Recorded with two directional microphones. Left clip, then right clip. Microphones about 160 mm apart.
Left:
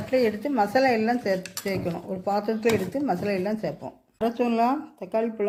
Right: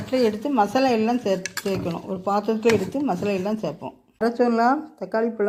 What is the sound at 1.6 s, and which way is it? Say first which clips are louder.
Speech: right 2 dB; 15° right (ahead or behind).